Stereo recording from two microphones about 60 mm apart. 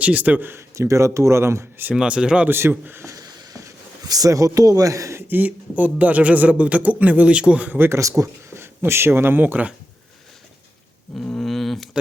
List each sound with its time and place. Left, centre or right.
0.0 s speech: right
0.8 s speech: right
2.0 s speech: centre
2.5 s a man's voice: right
3.1 s a sound: right
5.3 s speech: right
7.8 s speech: right
11.1 s a sound: centre